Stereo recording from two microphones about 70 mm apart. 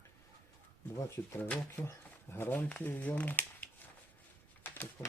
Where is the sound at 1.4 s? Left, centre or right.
Left.